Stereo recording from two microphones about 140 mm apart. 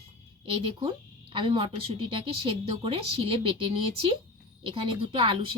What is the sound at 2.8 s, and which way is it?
Speech, 40° right (ahead or behind).